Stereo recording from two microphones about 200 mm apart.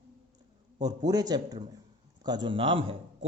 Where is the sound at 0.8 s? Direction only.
20° right (ahead or behind).